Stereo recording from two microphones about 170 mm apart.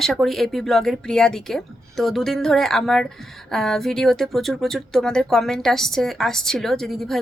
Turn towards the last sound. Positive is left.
turn(degrees=0)  # may be behind; listen again after turning